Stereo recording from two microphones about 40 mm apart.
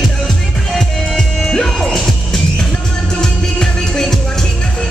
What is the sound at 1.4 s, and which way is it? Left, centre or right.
Music, left.